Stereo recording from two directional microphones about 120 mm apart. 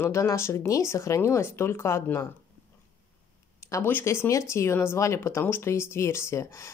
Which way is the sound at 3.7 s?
20° left (ahead or behind).